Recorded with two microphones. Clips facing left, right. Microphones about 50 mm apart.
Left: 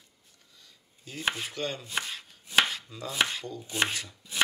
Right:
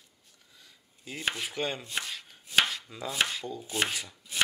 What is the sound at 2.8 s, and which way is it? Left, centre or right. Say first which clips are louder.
Chopping: right 1 dB; right.